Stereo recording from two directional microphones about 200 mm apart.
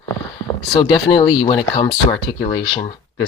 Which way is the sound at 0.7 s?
25° left (ahead or behind).